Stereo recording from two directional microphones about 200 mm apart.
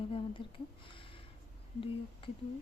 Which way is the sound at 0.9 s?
25° left (ahead or behind).